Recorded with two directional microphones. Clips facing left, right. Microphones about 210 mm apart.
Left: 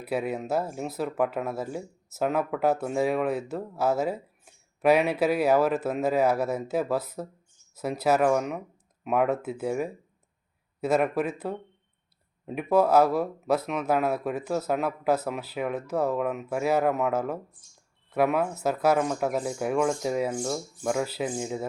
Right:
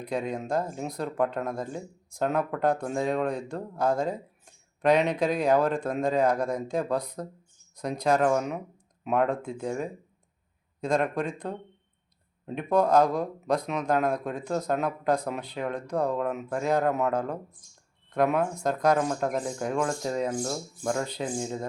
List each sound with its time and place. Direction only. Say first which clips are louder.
0.0 s speech: left 1 dB; 5° left (ahead or behind)